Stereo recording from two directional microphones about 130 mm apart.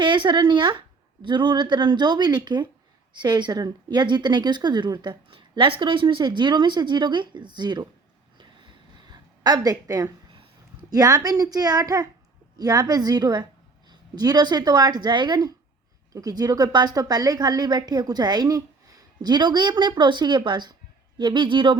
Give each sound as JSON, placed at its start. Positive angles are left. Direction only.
{"t": 0.0, "sound": "speech", "side_deg": -40}
{"t": 8.4, "sound": "a sound", "side_deg": -35}
{"t": 10.9, "sound": "a woman's voice", "side_deg": -30}